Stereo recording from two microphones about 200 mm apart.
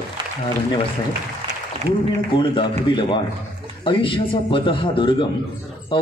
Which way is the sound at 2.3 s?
25° left (ahead or behind).